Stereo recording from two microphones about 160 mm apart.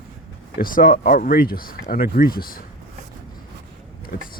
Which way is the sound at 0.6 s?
65° left (ahead or behind).